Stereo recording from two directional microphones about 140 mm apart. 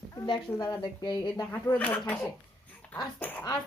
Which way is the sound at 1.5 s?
15° left (ahead or behind).